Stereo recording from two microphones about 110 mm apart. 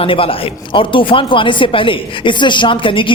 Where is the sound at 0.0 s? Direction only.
55° left (ahead or behind).